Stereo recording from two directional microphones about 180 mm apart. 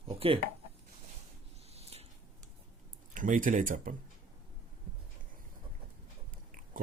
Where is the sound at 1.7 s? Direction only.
35° right (ahead or behind).